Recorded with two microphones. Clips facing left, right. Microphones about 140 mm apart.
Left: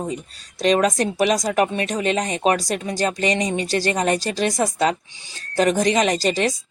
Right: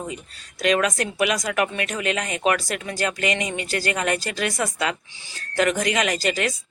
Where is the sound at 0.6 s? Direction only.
35° left (ahead or behind).